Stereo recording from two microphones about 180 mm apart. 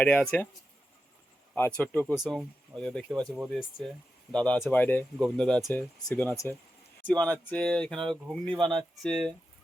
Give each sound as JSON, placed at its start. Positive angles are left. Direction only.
{"t": 0.0, "sound": "speech", "side_deg": 10}
{"t": 1.5, "sound": "speech", "side_deg": 10}
{"t": 2.1, "sound": "speech", "side_deg": 0}